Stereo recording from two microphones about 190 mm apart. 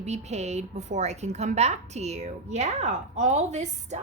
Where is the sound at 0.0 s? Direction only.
35° right (ahead or behind).